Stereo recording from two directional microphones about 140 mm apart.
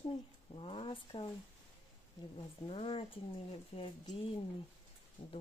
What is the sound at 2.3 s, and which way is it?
Speech, 40° left (ahead or behind).